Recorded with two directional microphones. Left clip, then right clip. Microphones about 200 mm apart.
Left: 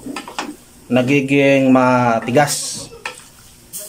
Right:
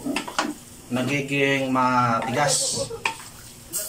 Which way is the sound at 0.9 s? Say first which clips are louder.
Left 10 dB; 60° left (ahead or behind).